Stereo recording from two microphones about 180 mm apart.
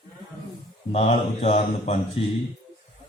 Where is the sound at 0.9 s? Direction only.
35° left (ahead or behind).